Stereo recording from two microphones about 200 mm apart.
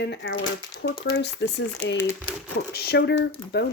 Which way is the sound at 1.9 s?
10° left (ahead or behind).